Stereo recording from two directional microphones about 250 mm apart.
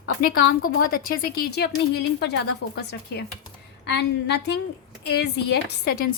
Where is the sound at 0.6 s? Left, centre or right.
Left.